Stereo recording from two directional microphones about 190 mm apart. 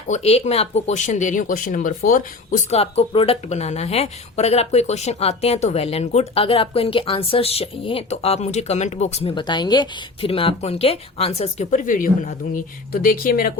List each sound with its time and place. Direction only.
0.1 s speech: 35° left (ahead or behind); by 13.5 s 50° left (ahead or behind)